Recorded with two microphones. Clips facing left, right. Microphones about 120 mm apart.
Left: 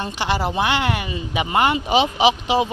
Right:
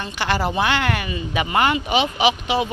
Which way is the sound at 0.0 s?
25° left (ahead or behind).